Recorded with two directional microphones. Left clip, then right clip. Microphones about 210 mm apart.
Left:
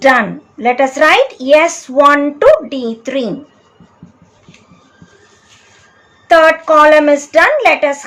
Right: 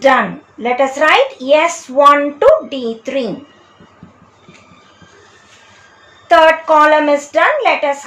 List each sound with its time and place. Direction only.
0.6 s speech: 20° left (ahead or behind)
6.2 s speech: 15° left (ahead or behind)